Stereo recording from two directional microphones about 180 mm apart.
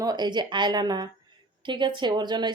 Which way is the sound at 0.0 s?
25° right (ahead or behind).